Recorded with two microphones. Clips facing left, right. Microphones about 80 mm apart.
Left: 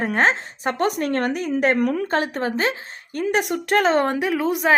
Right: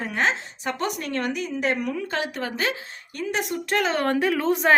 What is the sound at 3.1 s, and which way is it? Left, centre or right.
Speech, left.